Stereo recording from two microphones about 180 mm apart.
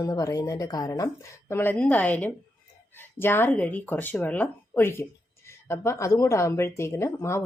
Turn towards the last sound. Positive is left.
turn(degrees=15)  # may be behind; listen again after turning